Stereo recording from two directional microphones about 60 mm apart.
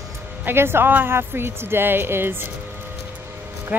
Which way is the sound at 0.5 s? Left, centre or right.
Right.